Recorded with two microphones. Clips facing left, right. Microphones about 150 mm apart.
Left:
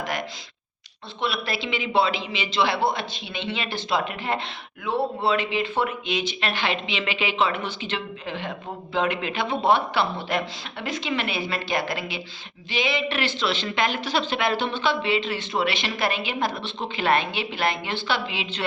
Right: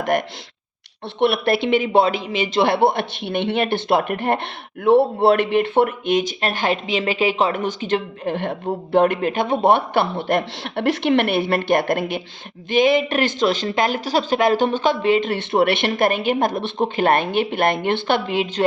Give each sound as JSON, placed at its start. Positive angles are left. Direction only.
{"t": 0.0, "sound": "a man's voice", "side_deg": -55}